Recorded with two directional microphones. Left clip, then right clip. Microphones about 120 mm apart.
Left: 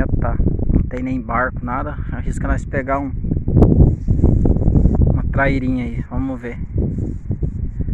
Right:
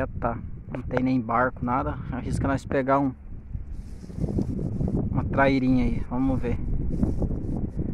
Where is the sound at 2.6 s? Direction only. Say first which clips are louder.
Left 2 dB; 20° right (ahead or behind).